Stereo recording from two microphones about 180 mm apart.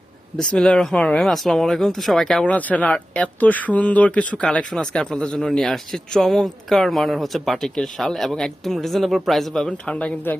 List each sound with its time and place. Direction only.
0.3 s speech: 5° left (ahead or behind)